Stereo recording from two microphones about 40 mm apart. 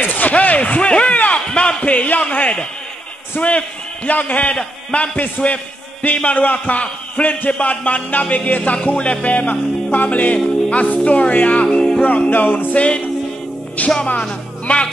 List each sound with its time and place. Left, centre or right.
0.0 s a sound: left
1.5 s a man's voice: left
4.6 s a man's voice: left
5.1 s a man's voice: left
9.5 s music: left
10.0 s a man's voice: left
12.3 s music: left
12.7 s music: left
14.0 s music: left